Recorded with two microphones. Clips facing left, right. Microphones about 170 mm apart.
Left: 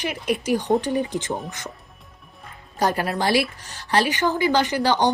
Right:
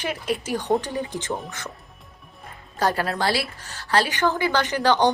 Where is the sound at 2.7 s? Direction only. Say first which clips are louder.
Left 1 dB; 15° left (ahead or behind).